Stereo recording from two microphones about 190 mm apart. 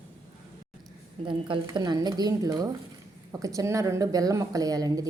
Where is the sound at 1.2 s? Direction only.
25° right (ahead or behind).